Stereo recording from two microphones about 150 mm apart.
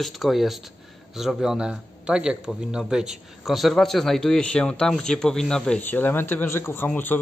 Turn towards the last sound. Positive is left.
turn(degrees=10)  # may be behind; listen again after turning